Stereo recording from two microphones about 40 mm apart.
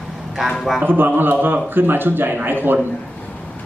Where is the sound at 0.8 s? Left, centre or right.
Right.